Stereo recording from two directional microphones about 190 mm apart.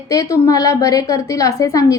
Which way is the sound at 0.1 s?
15° left (ahead or behind).